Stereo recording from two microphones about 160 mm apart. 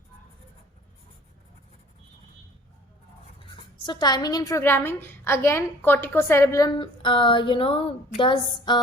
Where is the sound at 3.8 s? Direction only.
25° left (ahead or behind).